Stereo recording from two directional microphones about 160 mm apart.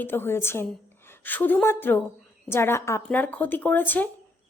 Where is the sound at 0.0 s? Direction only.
15° left (ahead or behind).